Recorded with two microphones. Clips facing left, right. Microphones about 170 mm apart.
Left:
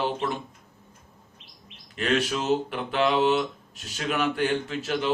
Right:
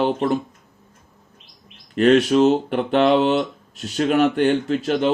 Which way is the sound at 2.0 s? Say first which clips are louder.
Right 12 dB; 40° right (ahead or behind).